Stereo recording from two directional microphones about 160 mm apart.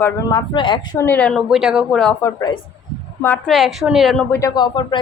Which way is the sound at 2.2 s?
25° left (ahead or behind).